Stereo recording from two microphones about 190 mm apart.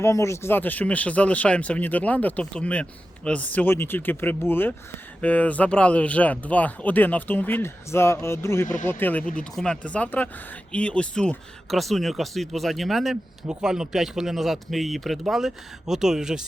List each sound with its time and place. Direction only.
0.0 s speech: 15° left (ahead or behind)
8.6 s speech: 45° left (ahead or behind)
8.9 s speech: 10° left (ahead or behind)